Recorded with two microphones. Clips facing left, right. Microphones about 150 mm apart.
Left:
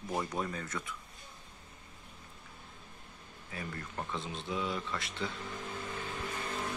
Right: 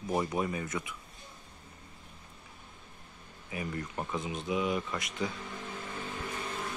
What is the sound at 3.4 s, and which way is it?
Speech, 10° right (ahead or behind).